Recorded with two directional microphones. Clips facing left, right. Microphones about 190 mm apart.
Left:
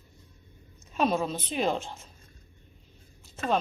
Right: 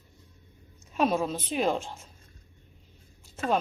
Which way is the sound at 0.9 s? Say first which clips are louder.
Right 1 dB; 5° right (ahead or behind).